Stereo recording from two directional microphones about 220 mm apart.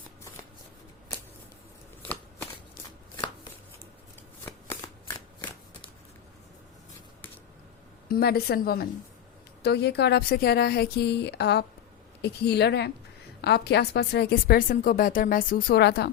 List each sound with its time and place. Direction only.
2.0 s shuffling cards: 5° left (ahead or behind)
4.4 s shuffling cards: 15° left (ahead or behind)
8.0 s a woman's voice: 45° left (ahead or behind)